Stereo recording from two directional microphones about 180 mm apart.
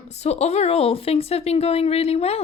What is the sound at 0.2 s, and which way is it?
Speech, 35° left (ahead or behind).